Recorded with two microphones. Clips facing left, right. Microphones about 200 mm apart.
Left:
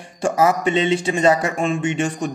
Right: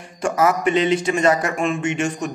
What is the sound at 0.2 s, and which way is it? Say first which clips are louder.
Speech: left 1 dB; 30° left (ahead or behind).